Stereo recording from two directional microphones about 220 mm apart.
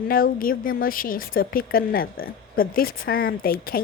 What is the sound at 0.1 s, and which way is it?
Speech, 40° left (ahead or behind).